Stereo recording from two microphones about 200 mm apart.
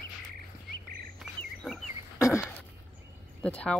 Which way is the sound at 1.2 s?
Centre (ahead or behind).